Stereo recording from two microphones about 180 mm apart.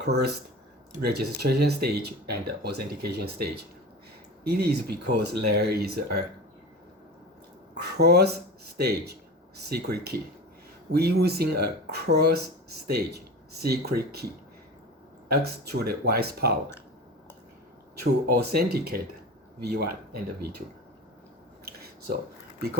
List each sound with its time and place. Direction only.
0.0 s speech: 65° right (ahead or behind)
4.6 s speech: 60° right (ahead or behind)
7.9 s speech: 65° right (ahead or behind)
15.3 s speech: 60° right (ahead or behind)
18.0 s speech: 60° right (ahead or behind)
21.6 s a sound: 60° right (ahead or behind)